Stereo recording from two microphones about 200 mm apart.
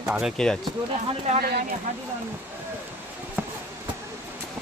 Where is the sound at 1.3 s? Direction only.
50° right (ahead or behind).